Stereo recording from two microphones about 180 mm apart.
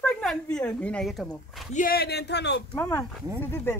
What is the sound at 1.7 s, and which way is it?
Speech, 55° left (ahead or behind).